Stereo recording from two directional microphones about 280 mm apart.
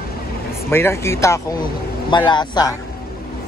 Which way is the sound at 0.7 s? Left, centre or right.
Centre.